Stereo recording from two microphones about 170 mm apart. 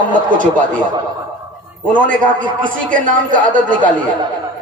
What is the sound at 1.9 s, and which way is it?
A man's voice, 50° right (ahead or behind).